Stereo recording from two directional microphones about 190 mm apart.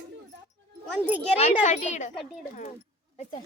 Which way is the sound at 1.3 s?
40° left (ahead or behind).